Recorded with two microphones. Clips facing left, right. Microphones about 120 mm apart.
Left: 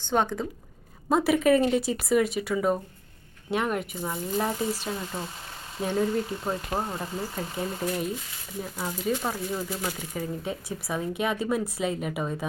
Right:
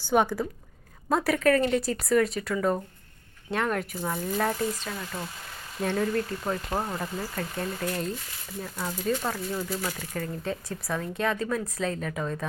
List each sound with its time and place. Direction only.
0.1 s a woman's voice: 5° right (ahead or behind); by 5.2 s 20° left (ahead or behind)
5.8 s speech: 10° left (ahead or behind)
7.3 s speech: 10° left (ahead or behind)